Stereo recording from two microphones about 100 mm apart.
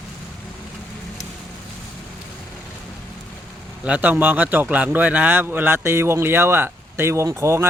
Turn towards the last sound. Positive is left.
turn(degrees=-30)  # may be behind; listen again after turning